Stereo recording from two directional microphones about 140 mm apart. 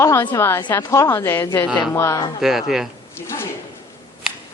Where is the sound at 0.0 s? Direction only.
20° left (ahead or behind).